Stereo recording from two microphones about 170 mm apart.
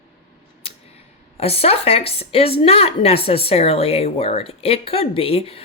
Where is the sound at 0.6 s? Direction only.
35° left (ahead or behind).